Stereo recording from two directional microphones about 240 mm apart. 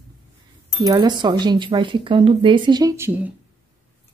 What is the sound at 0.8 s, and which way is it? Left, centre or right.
Speech, centre.